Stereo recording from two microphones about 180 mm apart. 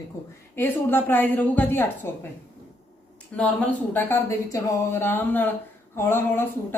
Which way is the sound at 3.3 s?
5° left (ahead or behind).